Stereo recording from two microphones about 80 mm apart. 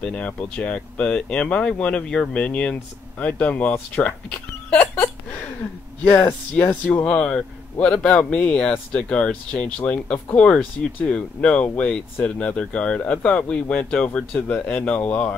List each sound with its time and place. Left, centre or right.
0.0 s speech: centre
6.5 s speech: centre